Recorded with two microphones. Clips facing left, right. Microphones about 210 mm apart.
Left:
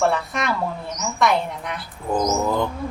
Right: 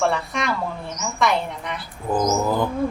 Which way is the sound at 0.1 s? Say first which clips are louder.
Left 1 dB; centre (ahead or behind).